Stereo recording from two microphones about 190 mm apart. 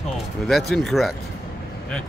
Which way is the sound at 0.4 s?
Centre (ahead or behind).